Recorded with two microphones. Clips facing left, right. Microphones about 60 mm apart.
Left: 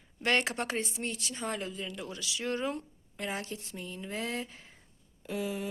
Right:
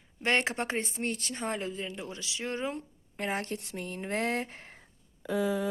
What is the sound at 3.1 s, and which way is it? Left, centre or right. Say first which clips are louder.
Speech: right 4 dB; right.